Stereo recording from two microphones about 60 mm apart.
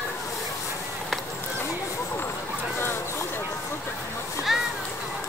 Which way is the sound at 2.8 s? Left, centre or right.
Left.